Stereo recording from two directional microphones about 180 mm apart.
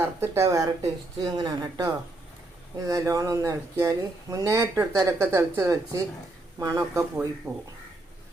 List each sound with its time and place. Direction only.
0.0 s speech: 15° right (ahead or behind)